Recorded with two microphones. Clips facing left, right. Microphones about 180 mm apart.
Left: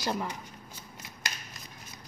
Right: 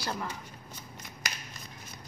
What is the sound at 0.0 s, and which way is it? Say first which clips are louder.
Shuffling cards: left 3 dB; 15° left (ahead or behind).